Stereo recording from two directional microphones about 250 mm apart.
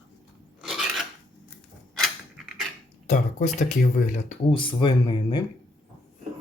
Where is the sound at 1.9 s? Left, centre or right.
Centre.